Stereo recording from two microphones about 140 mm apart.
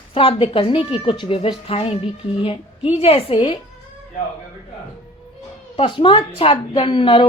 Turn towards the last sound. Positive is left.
turn(degrees=40)  # may be behind; listen again after turning